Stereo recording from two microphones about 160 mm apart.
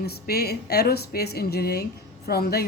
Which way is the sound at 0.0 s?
80° left.